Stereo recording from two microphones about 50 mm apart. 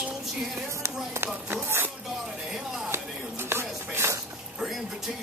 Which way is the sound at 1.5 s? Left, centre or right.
Right.